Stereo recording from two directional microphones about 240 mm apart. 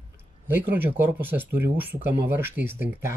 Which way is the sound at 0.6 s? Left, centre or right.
Centre.